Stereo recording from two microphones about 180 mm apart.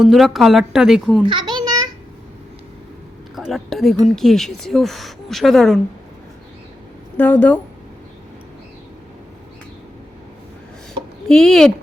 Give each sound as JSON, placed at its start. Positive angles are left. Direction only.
{"t": 0.0, "sound": "speech", "side_deg": 0}
{"t": 1.3, "sound": "a sound", "side_deg": -25}
{"t": 3.3, "sound": "speech", "side_deg": 0}
{"t": 7.2, "sound": "a woman's voice", "side_deg": 10}
{"t": 11.3, "sound": "speech", "side_deg": 0}